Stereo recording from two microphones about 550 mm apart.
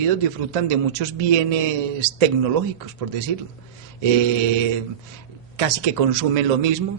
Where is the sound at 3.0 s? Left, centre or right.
Right.